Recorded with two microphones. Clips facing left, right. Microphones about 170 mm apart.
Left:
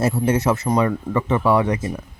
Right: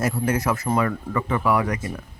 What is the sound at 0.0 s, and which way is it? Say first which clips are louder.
Speech: left 4 dB; 25° left (ahead or behind).